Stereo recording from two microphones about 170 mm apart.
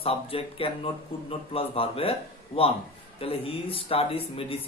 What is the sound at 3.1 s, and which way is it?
Speech, 35° left (ahead or behind).